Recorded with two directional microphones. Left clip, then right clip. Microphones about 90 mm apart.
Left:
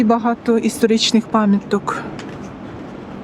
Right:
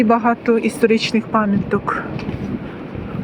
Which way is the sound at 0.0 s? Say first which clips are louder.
Right 2 dB; 45° left (ahead or behind).